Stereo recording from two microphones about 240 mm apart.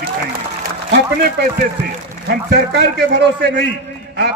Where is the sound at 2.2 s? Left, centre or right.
Right.